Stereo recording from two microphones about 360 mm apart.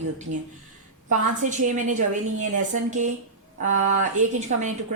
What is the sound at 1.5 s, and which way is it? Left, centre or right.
A woman's voice, right.